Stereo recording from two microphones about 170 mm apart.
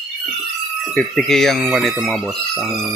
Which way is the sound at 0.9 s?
Centre (ahead or behind).